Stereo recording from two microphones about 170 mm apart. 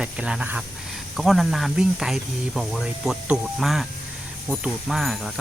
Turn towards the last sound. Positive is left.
turn(degrees=0)  # may be behind; listen again after turning